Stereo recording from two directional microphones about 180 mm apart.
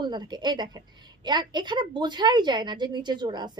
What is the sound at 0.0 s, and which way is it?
A woman's voice, 25° right (ahead or behind).